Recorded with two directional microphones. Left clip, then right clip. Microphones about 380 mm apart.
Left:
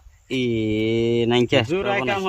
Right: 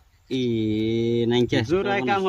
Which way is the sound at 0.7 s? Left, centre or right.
Left.